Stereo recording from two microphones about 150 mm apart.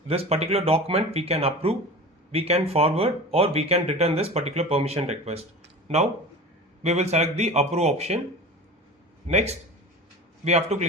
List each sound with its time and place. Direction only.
0.1 s speech: 45° right (ahead or behind)
6.8 s speech: 45° right (ahead or behind)
9.2 s speech: 45° right (ahead or behind)